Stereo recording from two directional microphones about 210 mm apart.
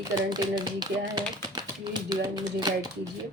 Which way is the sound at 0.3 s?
20° right (ahead or behind).